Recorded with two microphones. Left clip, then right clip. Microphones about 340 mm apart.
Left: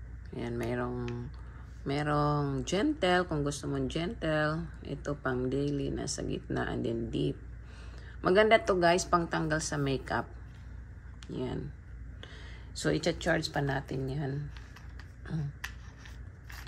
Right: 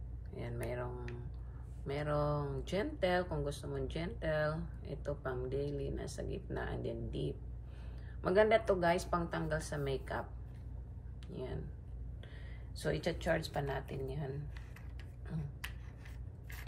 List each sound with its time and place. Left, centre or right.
0.4 s speech: left
11.3 s speech: left
12.7 s speech: left